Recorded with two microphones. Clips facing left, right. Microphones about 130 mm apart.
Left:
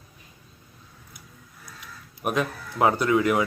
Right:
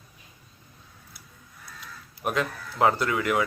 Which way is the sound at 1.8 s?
20° left (ahead or behind).